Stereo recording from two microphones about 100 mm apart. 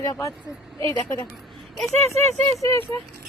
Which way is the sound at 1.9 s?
90° right.